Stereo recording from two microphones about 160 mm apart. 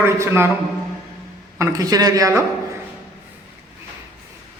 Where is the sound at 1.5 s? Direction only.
20° right (ahead or behind).